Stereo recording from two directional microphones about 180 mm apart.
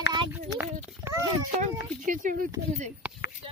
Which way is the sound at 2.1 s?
45° right (ahead or behind).